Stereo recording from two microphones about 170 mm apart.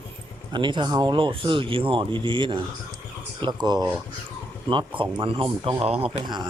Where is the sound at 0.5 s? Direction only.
30° right (ahead or behind).